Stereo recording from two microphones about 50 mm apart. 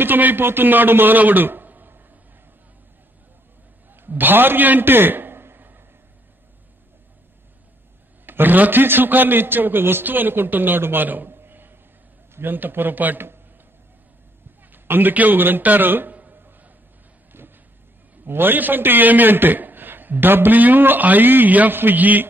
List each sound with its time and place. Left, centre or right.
0.0 s a man's voice: right
3.9 s a sound: right
8.3 s a man's voice: right
14.7 s a man's voice: right
16.2 s a sound: right
17.4 s vehicle: right
18.2 s a man's voice: right